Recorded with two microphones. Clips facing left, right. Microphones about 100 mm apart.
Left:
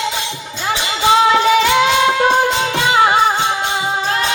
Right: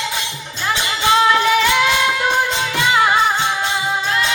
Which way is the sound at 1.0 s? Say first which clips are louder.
Left 3 dB; 25° left (ahead or behind).